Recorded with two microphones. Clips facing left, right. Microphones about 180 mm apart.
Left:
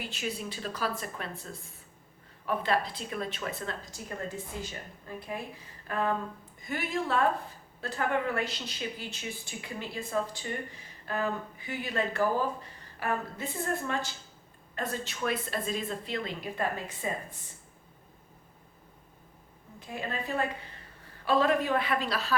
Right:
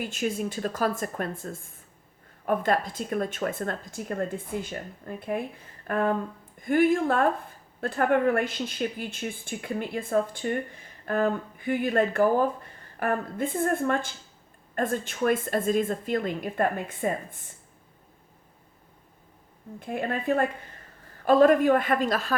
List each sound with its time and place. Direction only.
0.0 s speech: 45° right (ahead or behind)
19.8 s a woman's voice: 55° right (ahead or behind)